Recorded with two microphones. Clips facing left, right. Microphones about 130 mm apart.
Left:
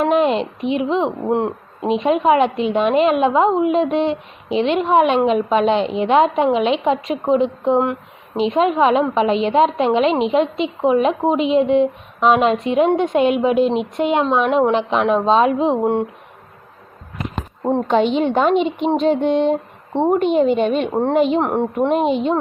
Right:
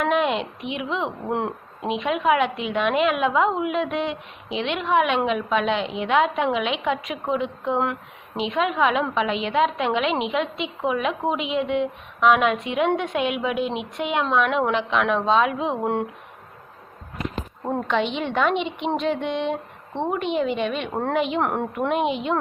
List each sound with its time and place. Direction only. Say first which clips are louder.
0.0 s a woman's voice: left 6 dB; 35° left (ahead or behind)
1.3 s speech: left 7 dB; 20° left (ahead or behind)
2.0 s a woman's voice: left 6 dB; 35° left (ahead or behind)
15.8 s speech: left 6 dB; 20° left (ahead or behind)
17.6 s a woman's voice: left 8 dB; 25° left (ahead or behind)
17.8 s a woman's voice: left 8 dB; 40° left (ahead or behind)
21.4 s a woman's voice: left 5 dB; 20° left (ahead or behind)
21.8 s a woman's voice: left 6 dB; 35° left (ahead or behind)